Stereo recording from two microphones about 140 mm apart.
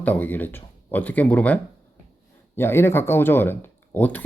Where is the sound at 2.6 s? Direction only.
15° left (ahead or behind).